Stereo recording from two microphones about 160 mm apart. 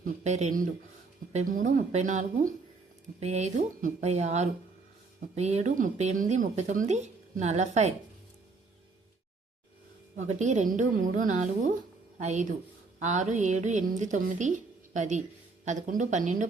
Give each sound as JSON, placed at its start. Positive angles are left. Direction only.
{"t": 0.0, "sound": "speech", "side_deg": -45}
{"t": 10.2, "sound": "speech", "side_deg": -45}